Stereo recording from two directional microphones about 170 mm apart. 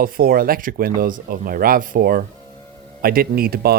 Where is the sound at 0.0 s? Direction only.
60° right (ahead or behind).